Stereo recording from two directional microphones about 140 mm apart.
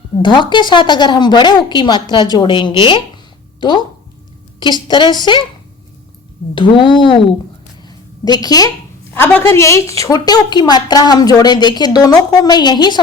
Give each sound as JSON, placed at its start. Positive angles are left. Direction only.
{"t": 0.2, "sound": "a woman's voice", "side_deg": 35}
{"t": 6.5, "sound": "a woman's voice", "side_deg": 35}
{"t": 7.9, "sound": "a sound", "side_deg": 30}
{"t": 9.1, "sound": "a woman's voice", "side_deg": 15}